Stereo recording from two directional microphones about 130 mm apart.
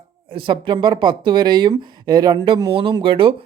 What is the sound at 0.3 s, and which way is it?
Speech, 40° right (ahead or behind).